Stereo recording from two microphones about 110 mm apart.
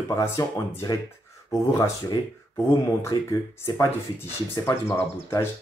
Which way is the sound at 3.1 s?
25° left (ahead or behind).